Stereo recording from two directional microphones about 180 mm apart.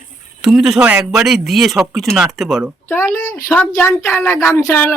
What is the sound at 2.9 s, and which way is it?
A woman's voice, 15° left (ahead or behind).